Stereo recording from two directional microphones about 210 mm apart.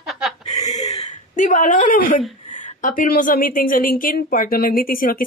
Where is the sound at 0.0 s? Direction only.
Centre (ahead or behind).